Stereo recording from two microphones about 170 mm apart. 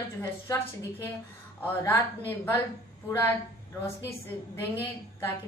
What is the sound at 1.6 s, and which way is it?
Speech, 10° left (ahead or behind).